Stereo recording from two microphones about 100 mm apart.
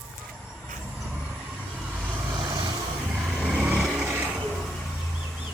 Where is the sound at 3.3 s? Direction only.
15° right (ahead or behind).